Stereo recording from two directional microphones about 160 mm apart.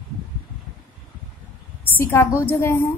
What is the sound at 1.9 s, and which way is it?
Speech, 15° left (ahead or behind).